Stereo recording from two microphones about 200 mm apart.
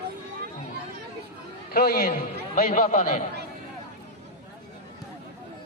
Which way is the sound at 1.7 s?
50° left (ahead or behind).